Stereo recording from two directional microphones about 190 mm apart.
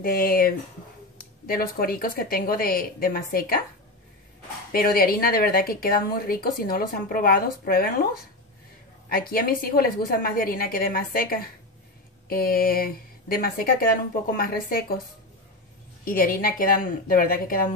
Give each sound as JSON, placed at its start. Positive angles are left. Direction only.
{"t": 0.0, "sound": "speech", "side_deg": 50}
{"t": 1.5, "sound": "speech", "side_deg": 50}
{"t": 4.7, "sound": "speech", "side_deg": 50}
{"t": 16.1, "sound": "speech", "side_deg": 50}